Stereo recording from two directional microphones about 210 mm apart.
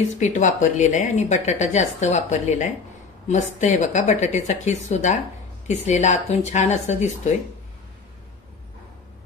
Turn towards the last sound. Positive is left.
turn(degrees=30)  # may be behind; listen again after turning